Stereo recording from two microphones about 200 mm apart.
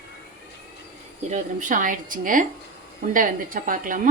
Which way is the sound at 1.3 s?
40° right (ahead or behind).